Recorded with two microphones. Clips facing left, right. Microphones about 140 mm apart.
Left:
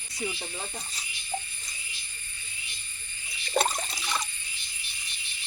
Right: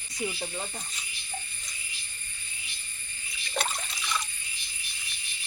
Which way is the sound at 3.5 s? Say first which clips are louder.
Left 6 dB; 40° left (ahead or behind).